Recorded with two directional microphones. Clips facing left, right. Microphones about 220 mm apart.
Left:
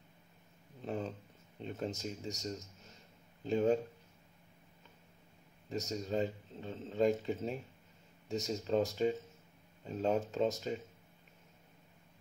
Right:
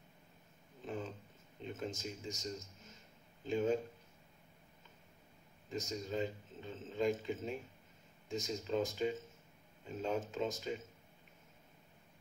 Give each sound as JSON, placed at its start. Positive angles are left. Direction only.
{"t": 1.6, "sound": "speech", "side_deg": 35}
{"t": 3.4, "sound": "speech", "side_deg": 35}
{"t": 5.7, "sound": "speech", "side_deg": 40}